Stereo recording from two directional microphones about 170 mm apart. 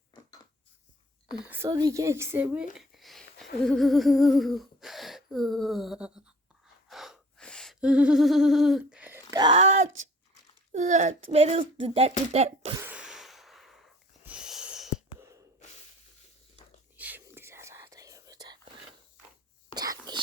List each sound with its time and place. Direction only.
1.5 s a woman's voice: 15° right (ahead or behind)
2.7 s humming: centre (ahead or behind)
6.8 s gasp: centre (ahead or behind)
9.3 s speech: 25° right (ahead or behind)
9.6 s speech: 45° right (ahead or behind)
12.7 s a sound: 10° right (ahead or behind)
15.2 s a sound: 20° right (ahead or behind)
17.0 s whispering: 10° right (ahead or behind)
19.7 s whispering: 25° right (ahead or behind)